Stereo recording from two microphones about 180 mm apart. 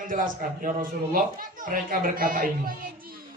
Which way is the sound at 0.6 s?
50° right (ahead or behind).